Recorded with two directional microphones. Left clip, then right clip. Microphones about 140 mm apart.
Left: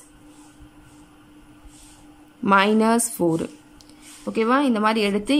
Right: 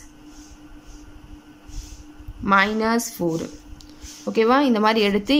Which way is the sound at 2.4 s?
15° left (ahead or behind).